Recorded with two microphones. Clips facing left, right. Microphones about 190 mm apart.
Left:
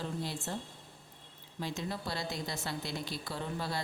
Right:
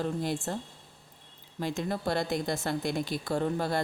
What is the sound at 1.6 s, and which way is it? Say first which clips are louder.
Speech: right 7 dB; 50° right (ahead or behind).